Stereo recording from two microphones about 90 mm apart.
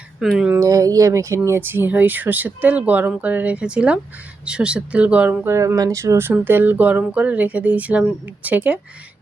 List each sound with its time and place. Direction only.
0.2 s speech: 5° right (ahead or behind)
0.6 s speech: 40° right (ahead or behind); by 5.5 s 20° right (ahead or behind)
5.5 s speech: 35° right (ahead or behind); by 8.8 s 20° right (ahead or behind)